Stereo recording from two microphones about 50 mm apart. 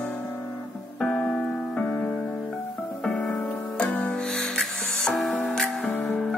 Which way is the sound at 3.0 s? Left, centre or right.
Centre.